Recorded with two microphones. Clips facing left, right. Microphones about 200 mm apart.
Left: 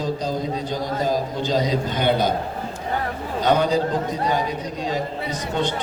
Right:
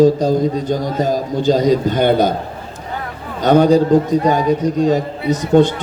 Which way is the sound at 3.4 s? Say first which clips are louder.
Right 8 dB; 45° right (ahead or behind).